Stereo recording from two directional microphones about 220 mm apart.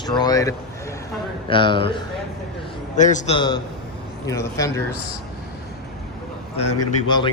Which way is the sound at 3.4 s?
20° left (ahead or behind).